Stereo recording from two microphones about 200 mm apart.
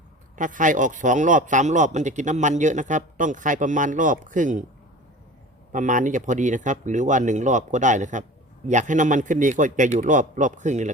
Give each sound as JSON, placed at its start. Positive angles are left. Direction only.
{"t": 0.3, "sound": "speech", "side_deg": -40}
{"t": 5.7, "sound": "speech", "side_deg": -40}